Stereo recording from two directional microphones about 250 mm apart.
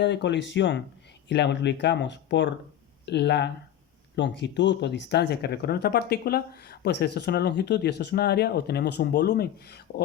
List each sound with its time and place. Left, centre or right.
0.0 s speech: left